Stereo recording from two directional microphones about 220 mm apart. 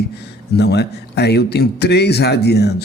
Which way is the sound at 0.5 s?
50° left (ahead or behind).